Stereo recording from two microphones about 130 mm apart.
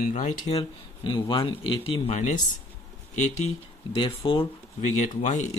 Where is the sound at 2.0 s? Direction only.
65° left (ahead or behind).